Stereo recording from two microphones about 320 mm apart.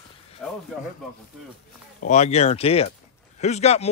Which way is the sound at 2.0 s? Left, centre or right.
Left.